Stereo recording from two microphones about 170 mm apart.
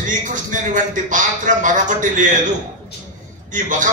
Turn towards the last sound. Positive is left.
turn(degrees=-50)  # may be behind; listen again after turning